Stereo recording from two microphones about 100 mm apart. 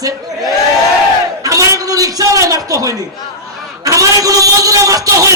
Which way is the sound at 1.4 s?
35° right (ahead or behind).